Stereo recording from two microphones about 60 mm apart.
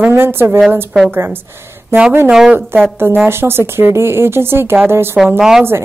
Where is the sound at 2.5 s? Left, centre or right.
Right.